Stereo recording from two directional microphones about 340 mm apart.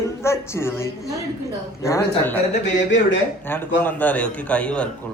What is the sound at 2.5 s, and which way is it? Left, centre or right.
Speech, left.